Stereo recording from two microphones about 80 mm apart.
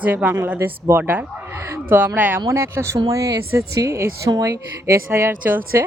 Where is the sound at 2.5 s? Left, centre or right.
Right.